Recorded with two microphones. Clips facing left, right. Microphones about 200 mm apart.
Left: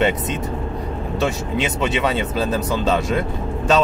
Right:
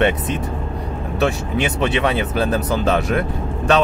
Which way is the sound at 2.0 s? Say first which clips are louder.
Right 2 dB; 65° right (ahead or behind).